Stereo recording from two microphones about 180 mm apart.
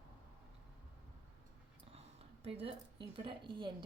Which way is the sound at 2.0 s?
35° right (ahead or behind).